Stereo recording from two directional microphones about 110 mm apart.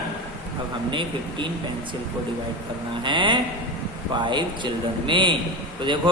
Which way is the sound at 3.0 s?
45° right (ahead or behind).